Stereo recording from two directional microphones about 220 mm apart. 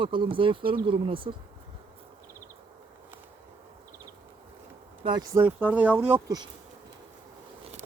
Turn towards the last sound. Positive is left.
turn(degrees=-10)  # may be behind; listen again after turning